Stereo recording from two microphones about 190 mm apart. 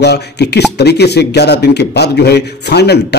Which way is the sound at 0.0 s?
60° left (ahead or behind).